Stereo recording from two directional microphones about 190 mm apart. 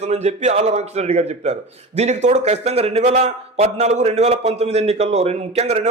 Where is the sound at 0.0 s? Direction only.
35° right (ahead or behind).